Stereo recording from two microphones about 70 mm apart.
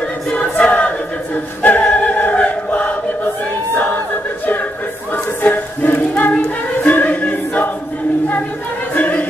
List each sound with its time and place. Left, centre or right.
0.3 s choir: centre
5.1 s a sound: left
6.8 s choir: left
8.9 s choir: left